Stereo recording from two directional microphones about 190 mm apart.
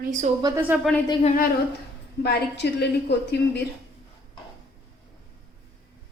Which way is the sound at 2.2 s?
60° left (ahead or behind).